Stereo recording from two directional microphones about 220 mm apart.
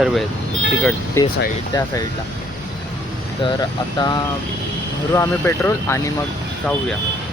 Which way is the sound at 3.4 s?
20° left (ahead or behind).